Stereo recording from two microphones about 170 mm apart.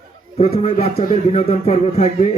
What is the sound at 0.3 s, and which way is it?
A man's voice, 40° left (ahead or behind).